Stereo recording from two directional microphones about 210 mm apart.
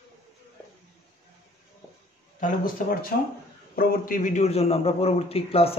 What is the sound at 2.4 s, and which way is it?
A man's voice, 40° left (ahead or behind).